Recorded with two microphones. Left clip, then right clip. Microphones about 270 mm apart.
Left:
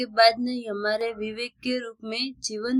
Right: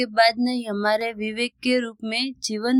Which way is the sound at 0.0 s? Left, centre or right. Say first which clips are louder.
Right 1 dB; right.